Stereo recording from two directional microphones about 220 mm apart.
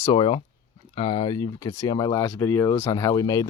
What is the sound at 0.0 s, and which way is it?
Speech, 20° left (ahead or behind).